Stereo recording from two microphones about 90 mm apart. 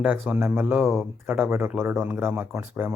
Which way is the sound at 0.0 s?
15° right (ahead or behind).